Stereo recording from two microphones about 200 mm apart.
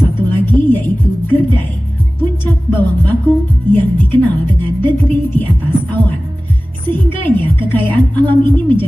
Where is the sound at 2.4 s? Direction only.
10° left (ahead or behind).